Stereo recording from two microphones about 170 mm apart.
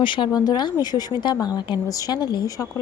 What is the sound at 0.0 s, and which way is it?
Speech, 30° left (ahead or behind).